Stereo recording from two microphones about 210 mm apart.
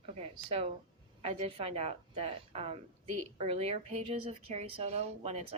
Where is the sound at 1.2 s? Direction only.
30° right (ahead or behind).